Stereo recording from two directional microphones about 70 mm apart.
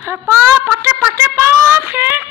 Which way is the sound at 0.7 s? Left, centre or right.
Centre.